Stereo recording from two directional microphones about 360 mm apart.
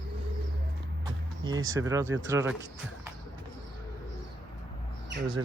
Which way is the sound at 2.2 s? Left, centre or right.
Centre.